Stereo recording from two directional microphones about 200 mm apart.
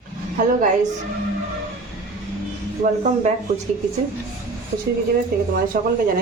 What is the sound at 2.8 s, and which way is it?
Speech, 35° right (ahead or behind).